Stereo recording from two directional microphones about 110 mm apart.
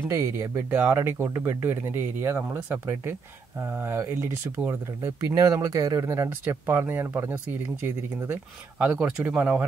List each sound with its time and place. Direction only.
0.1 s speech: 25° right (ahead or behind)